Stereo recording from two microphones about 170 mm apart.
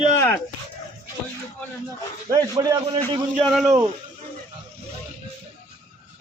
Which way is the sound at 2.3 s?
20° right (ahead or behind).